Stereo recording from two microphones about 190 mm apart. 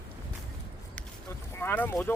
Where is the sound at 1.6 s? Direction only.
10° left (ahead or behind).